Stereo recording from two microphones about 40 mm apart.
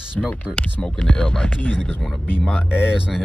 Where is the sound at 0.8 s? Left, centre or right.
Centre.